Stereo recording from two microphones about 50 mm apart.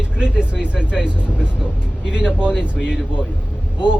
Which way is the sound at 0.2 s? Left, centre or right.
Centre.